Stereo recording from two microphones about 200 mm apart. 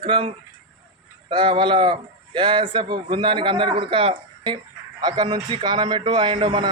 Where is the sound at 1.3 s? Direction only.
25° right (ahead or behind).